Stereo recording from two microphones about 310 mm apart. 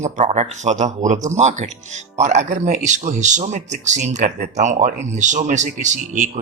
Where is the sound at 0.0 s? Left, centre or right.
Right.